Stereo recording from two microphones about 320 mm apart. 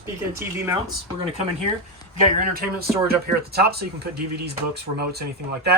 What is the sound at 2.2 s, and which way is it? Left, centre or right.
Speech, right.